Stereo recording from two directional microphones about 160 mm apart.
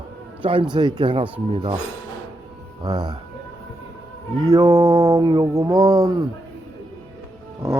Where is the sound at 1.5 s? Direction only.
35° right (ahead or behind).